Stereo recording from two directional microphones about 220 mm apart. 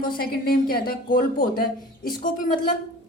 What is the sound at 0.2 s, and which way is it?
Speech, 40° left (ahead or behind).